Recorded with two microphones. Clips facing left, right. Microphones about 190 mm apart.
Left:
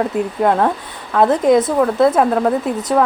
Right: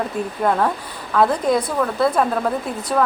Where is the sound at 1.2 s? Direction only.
20° left (ahead or behind).